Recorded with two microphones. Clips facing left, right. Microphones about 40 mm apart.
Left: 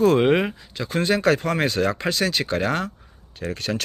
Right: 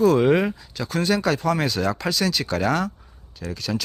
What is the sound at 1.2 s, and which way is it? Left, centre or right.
Speech, left.